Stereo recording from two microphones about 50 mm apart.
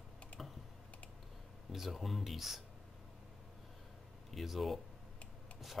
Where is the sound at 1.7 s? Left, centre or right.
Centre.